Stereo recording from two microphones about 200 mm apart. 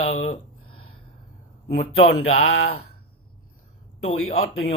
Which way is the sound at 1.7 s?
40° left (ahead or behind).